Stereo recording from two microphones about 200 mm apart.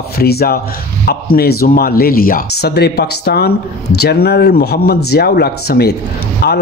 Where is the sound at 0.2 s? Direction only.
50° left (ahead or behind).